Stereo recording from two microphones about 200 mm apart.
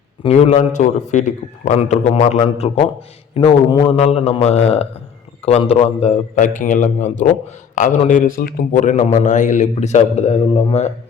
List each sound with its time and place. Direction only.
0.2 s a man's voice: 30° left (ahead or behind)